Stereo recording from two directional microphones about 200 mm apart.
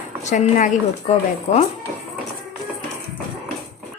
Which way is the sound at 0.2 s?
35° left (ahead or behind).